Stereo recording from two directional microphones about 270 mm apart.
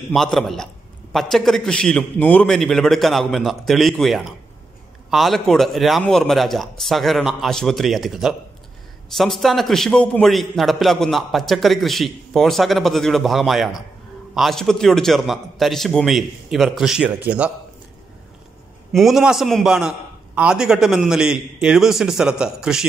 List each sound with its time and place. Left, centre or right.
0.1 s a man's voice: centre
18.9 s a man's voice: centre